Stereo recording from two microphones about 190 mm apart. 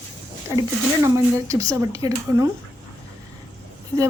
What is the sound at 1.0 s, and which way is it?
Speech, 15° right (ahead or behind).